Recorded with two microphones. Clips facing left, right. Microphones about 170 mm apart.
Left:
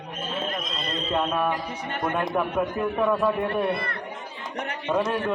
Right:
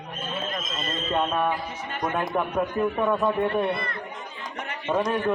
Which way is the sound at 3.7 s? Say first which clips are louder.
Left 1 dB; 65° left (ahead or behind).